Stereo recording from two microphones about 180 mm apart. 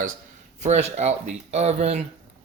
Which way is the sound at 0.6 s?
40° right (ahead or behind).